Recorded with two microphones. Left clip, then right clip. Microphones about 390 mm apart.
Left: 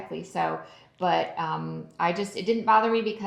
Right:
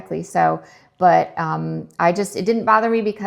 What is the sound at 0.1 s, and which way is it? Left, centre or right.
A woman's voice, right.